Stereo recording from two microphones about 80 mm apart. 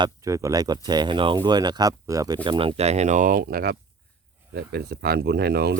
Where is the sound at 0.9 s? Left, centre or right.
Right.